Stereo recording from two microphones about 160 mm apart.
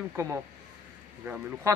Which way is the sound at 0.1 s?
20° right (ahead or behind).